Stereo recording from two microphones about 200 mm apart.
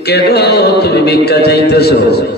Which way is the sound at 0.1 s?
55° left (ahead or behind).